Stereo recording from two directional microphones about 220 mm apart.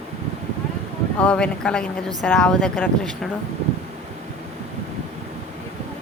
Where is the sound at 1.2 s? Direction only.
5° left (ahead or behind).